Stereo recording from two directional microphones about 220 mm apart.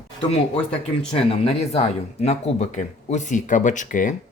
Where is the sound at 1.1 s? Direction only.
30° left (ahead or behind).